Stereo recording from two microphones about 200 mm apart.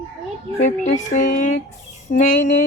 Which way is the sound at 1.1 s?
40° left (ahead or behind).